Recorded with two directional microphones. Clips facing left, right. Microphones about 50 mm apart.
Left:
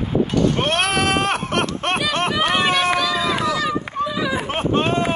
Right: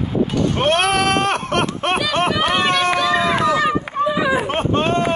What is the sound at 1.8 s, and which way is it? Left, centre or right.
Run, centre.